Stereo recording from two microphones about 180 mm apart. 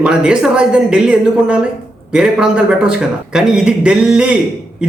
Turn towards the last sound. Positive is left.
turn(degrees=-5)  # may be behind; listen again after turning